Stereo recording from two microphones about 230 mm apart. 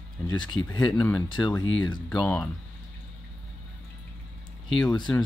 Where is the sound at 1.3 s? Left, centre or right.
Centre.